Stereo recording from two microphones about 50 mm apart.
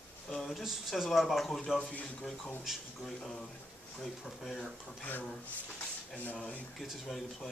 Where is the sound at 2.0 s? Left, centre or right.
Left.